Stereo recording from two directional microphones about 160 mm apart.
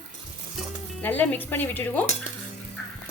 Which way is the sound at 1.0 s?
10° left (ahead or behind).